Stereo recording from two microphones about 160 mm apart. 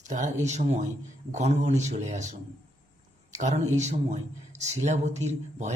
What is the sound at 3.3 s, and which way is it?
A man's voice, 45° right (ahead or behind).